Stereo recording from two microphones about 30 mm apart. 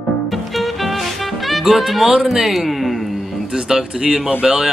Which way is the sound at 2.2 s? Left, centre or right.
Centre.